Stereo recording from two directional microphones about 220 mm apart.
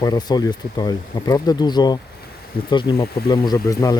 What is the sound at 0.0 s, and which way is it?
Speech, 20° left (ahead or behind).